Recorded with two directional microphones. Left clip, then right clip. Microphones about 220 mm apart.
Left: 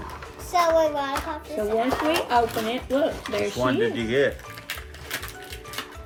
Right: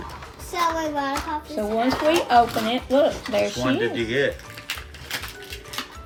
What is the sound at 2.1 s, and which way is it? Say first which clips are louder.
Speech: right 7 dB; 15° right (ahead or behind).